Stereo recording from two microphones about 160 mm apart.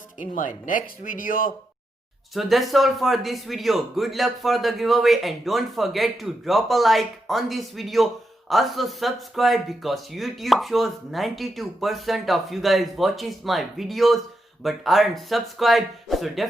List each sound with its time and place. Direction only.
0.3 s speech: 55° left (ahead or behind)
2.3 s speech: centre (ahead or behind)